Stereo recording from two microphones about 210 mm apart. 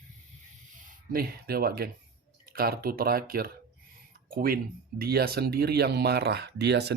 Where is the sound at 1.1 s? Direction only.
45° right (ahead or behind).